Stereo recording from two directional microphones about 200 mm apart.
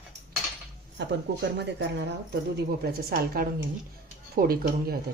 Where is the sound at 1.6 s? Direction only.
60° right (ahead or behind).